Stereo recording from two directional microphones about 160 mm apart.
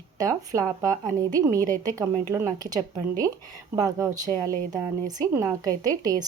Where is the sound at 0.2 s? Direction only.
20° right (ahead or behind).